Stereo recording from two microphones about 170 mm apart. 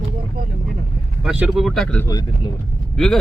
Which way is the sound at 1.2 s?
5° right (ahead or behind).